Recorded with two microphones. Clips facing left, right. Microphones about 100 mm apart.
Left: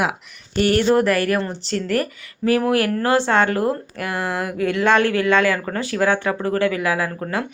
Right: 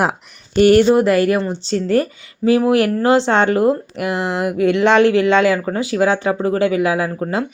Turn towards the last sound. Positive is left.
turn(degrees=-25)  # may be behind; listen again after turning